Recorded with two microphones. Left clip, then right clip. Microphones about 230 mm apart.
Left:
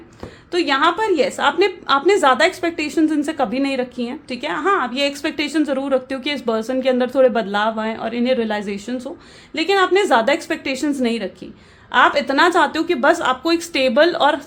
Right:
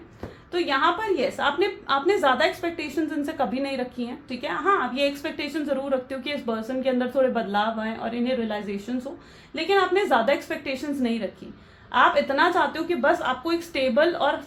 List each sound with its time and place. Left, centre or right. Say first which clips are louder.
0.5 s a woman's voice: left 6 dB; left